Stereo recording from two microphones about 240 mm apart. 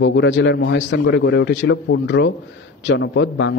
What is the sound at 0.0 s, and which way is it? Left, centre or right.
A man's voice, left.